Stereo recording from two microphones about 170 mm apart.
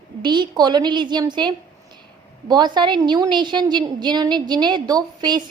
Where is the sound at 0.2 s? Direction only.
25° right (ahead or behind).